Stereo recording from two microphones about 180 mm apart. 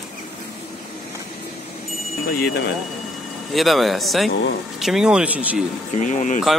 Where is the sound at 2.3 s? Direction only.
65° left (ahead or behind).